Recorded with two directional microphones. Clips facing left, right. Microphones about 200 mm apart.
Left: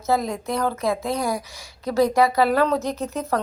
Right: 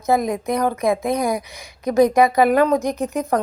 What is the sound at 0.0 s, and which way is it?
Speech, 15° right (ahead or behind).